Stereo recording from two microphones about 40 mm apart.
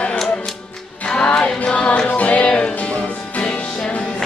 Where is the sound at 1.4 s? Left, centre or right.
Left.